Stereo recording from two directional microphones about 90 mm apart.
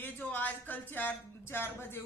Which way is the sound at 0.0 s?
20° left (ahead or behind).